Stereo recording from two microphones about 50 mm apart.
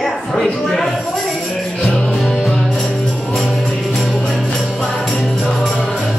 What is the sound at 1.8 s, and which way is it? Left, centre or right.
Music, centre.